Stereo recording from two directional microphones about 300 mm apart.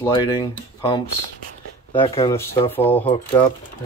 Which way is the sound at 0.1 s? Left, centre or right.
Centre.